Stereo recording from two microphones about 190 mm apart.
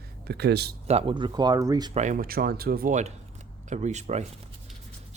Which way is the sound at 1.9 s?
40° right (ahead or behind).